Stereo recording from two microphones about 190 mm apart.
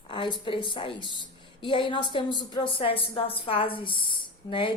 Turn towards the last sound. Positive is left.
turn(degrees=25)  # may be behind; listen again after turning